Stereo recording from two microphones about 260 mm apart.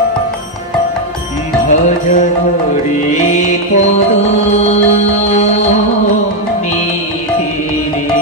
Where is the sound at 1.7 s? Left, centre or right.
Left.